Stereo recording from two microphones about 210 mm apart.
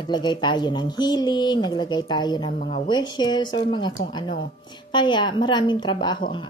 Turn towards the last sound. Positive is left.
turn(degrees=20)  # may be behind; listen again after turning